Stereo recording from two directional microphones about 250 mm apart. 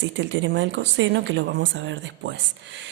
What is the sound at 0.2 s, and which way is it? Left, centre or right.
A woman's voice, right.